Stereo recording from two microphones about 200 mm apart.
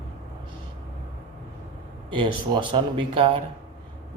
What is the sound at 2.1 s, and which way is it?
Speech, 25° right (ahead or behind).